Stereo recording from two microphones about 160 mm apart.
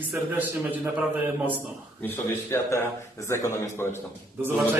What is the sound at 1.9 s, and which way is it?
A man's voice, 15° left (ahead or behind).